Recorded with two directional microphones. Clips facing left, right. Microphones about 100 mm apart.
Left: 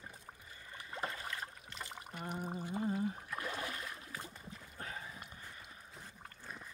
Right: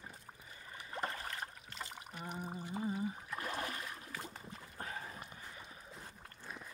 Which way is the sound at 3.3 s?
35° right (ahead or behind).